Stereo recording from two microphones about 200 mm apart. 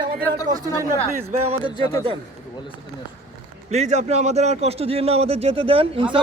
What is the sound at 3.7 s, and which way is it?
A man's voice, 35° right (ahead or behind).